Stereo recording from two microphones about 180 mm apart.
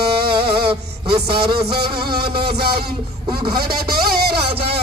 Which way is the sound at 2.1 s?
60° right (ahead or behind).